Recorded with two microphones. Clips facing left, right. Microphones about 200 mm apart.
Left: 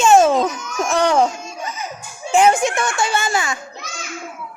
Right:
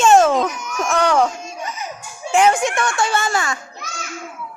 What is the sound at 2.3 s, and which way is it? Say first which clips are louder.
Speech: left 1 dB; 25° left (ahead or behind).